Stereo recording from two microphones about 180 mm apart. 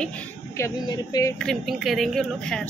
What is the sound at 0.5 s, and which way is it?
Speech, 20° left (ahead or behind).